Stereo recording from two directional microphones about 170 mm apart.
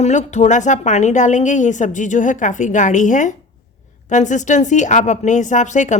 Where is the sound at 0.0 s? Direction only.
45° left (ahead or behind).